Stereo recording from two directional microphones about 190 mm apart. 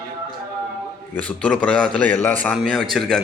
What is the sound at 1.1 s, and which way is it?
A man's voice, 5° left (ahead or behind).